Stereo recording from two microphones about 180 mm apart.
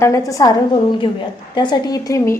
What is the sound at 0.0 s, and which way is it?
A woman's voice, 15° left (ahead or behind).